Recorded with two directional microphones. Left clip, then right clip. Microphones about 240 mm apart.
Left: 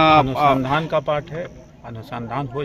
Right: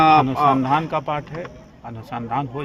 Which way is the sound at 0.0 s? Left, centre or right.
Left.